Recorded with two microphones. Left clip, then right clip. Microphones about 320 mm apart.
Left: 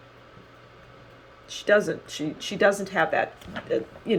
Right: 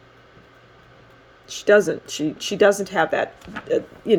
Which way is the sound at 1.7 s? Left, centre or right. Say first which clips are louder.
Right 5 dB; right.